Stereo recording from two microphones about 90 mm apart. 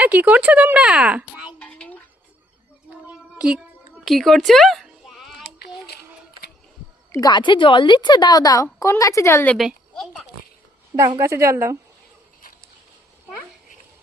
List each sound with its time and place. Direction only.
0.0 s speech: 15° right (ahead or behind)
0.8 s a child's voice: 5° right (ahead or behind)
1.5 s a sound: 15° left (ahead or behind)
3.3 s speech: 10° right (ahead or behind)
4.0 s a sound: centre (ahead or behind)
7.3 s a woman's voice: 55° left (ahead or behind); by 9.4 s 35° left (ahead or behind)
9.9 s speech: 5° left (ahead or behind)
11.2 s a woman's voice: 30° right (ahead or behind)